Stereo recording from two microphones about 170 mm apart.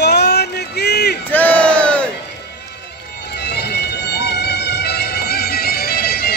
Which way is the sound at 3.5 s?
75° left (ahead or behind).